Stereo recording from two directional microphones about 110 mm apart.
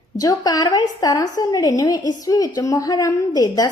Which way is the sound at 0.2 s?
35° left (ahead or behind).